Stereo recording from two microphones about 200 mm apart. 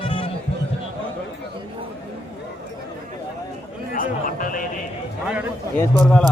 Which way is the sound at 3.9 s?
45° left (ahead or behind).